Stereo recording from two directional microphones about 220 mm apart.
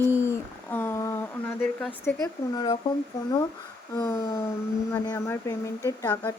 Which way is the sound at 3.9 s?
15° left (ahead or behind).